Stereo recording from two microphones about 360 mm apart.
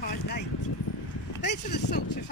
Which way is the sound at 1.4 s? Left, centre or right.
Left.